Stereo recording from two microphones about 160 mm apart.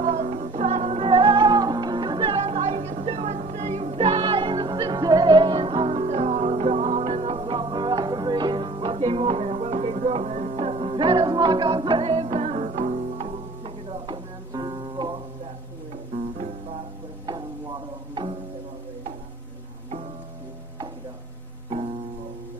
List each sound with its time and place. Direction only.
0.0 s music: 45° right (ahead or behind)
13.8 s music: 30° right (ahead or behind)
17.3 s tick-tock: 30° right (ahead or behind)